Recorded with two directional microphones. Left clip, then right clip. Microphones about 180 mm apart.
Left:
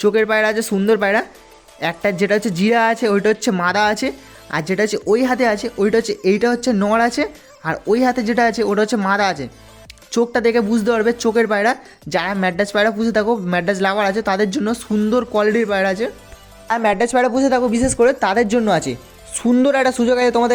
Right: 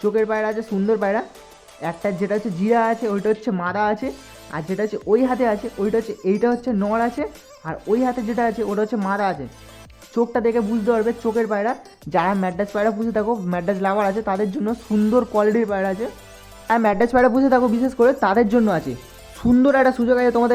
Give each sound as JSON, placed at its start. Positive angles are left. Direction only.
{"t": 0.0, "sound": "speech", "side_deg": 15}
{"t": 17.6, "sound": "speech", "side_deg": 5}